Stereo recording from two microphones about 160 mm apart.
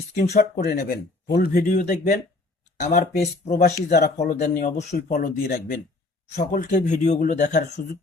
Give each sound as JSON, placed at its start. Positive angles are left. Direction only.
{"t": 0.1, "sound": "speech", "side_deg": 50}
{"t": 1.7, "sound": "speech", "side_deg": 50}
{"t": 3.5, "sound": "speech", "side_deg": 90}
{"t": 3.8, "sound": "speech", "side_deg": 50}
{"t": 6.3, "sound": "speech", "side_deg": 50}